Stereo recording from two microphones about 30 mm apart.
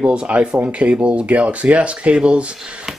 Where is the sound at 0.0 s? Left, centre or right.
Right.